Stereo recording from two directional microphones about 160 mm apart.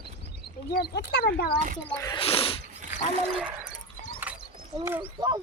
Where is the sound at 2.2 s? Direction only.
35° left (ahead or behind).